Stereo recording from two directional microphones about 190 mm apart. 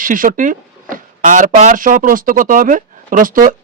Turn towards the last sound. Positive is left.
turn(degrees=-45)  # may be behind; listen again after turning